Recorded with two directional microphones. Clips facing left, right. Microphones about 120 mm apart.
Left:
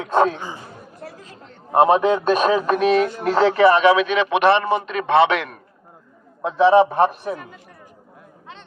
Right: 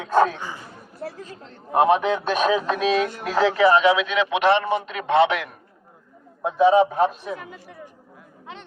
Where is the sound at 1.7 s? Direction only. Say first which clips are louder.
Left 3 dB; 35° left (ahead or behind); by 5.5 s 70° left (ahead or behind).